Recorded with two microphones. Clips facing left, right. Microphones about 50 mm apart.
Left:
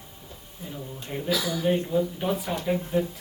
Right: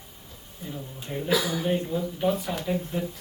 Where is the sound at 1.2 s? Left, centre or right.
Right.